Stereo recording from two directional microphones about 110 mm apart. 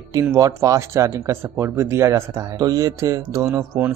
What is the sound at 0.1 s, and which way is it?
A man's voice, 30° right (ahead or behind).